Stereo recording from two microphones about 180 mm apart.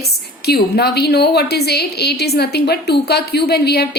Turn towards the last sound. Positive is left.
turn(degrees=65)  # may be behind; listen again after turning